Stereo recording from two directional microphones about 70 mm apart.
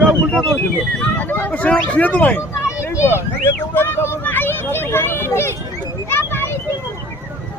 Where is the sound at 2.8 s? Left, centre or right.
Left.